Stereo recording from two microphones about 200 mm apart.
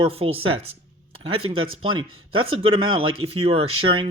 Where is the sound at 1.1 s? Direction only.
25° right (ahead or behind).